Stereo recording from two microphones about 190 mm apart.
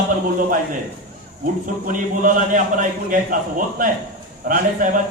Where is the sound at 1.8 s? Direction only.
45° right (ahead or behind).